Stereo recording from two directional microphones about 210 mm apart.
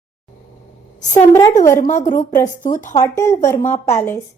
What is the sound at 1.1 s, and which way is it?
Speech, 10° left (ahead or behind).